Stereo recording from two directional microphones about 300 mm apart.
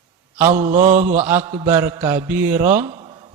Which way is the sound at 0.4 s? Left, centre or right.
Right.